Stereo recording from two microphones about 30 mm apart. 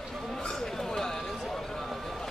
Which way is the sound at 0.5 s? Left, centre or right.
Centre.